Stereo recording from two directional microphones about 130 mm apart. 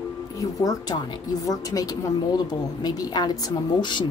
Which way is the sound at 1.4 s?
25° left (ahead or behind).